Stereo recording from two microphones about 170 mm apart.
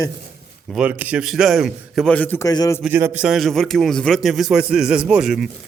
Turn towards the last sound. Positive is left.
turn(degrees=0)  # may be behind; listen again after turning